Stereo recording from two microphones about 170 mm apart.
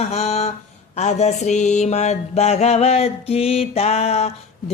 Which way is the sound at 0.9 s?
40° left (ahead or behind).